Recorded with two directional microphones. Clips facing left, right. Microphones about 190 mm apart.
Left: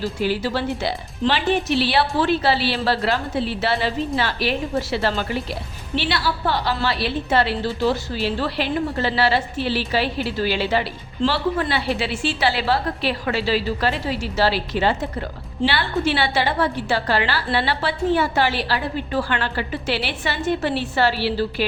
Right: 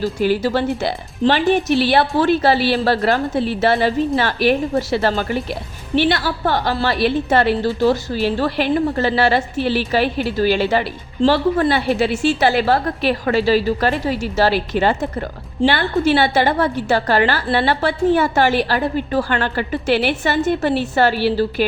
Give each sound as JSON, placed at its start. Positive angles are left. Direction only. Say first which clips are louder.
{"t": 0.2, "sound": "a woman's voice", "louder": "right 5 dB", "side_deg": -50}